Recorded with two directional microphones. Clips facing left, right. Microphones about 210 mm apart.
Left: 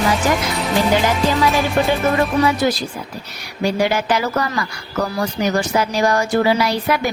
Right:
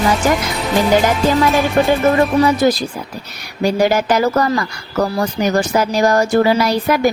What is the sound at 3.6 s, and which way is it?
A woman's voice, 40° right (ahead or behind).